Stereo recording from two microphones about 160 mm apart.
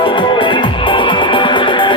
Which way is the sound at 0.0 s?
30° left (ahead or behind).